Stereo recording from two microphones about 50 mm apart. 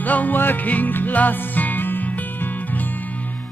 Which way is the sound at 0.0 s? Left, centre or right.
Left.